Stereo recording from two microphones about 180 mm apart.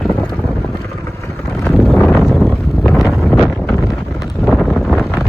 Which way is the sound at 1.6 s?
Centre (ahead or behind).